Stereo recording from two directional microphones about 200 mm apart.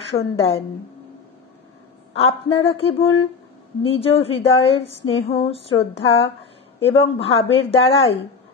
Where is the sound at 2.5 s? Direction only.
30° left (ahead or behind).